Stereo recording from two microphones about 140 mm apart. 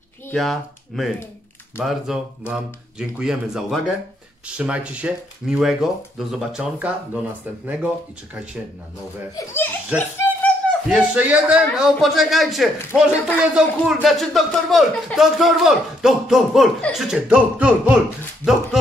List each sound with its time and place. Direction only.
0.3 s speech: centre (ahead or behind)
9.3 s a child's voice: 15° left (ahead or behind)
9.9 s a sound: 15° left (ahead or behind)
10.9 s speech: 10° right (ahead or behind)